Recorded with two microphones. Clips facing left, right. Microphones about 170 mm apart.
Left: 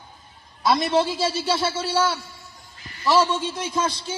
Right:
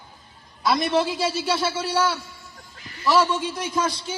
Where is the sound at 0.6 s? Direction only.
25° left (ahead or behind).